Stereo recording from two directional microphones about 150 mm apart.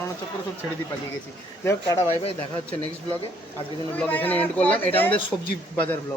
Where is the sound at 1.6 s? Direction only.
20° left (ahead or behind).